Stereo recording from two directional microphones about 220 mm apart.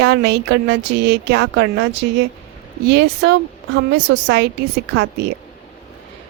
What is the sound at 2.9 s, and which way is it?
Speech, 50° right (ahead or behind).